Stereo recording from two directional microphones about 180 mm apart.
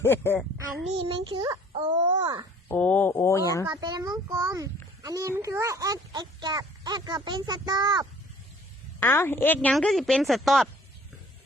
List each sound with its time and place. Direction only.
0.0 s speech: 15° left (ahead or behind)
1.0 s child singing: 30° right (ahead or behind)
2.0 s babbling: 30° right (ahead or behind)
2.6 s speech: 10° left (ahead or behind)
3.6 s a child's voice: 20° right (ahead or behind)
9.0 s a woman's voice: 10° left (ahead or behind)